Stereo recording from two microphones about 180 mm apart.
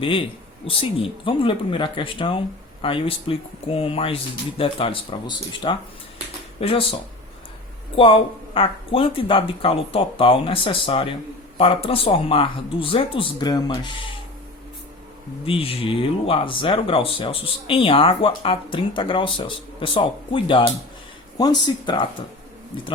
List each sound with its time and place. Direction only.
0.0 s speech: 30° left (ahead or behind)
7.9 s speech: 30° left (ahead or behind)
15.4 s speech: 30° left (ahead or behind)